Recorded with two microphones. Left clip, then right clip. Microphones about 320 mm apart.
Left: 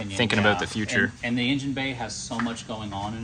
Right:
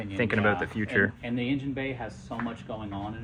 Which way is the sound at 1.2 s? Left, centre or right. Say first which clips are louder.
Left 5 dB; left.